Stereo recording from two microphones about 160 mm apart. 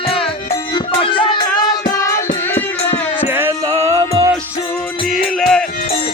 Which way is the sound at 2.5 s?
10° left (ahead or behind).